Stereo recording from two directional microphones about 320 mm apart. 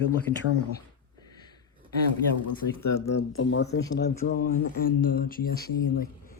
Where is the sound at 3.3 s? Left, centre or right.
Left.